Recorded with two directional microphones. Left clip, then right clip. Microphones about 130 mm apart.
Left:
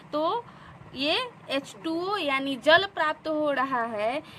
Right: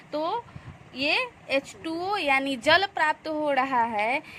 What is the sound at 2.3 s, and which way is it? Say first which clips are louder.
A woman's voice: even; 35° right (ahead or behind).